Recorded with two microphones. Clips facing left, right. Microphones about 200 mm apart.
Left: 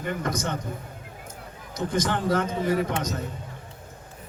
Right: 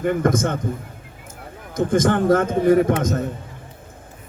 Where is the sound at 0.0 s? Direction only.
50° right (ahead or behind).